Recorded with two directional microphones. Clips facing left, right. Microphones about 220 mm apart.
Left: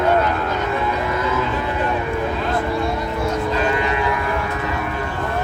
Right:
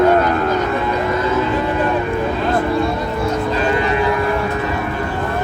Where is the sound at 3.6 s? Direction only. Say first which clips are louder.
Right 3 dB; 35° right (ahead or behind).